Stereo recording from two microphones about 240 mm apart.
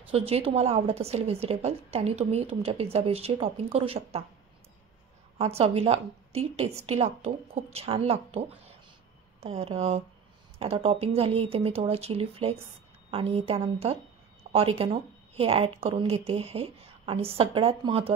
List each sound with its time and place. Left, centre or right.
0.3 s a woman's voice: right
5.4 s a woman's voice: right
14.5 s a sound: right
14.8 s a woman's voice: right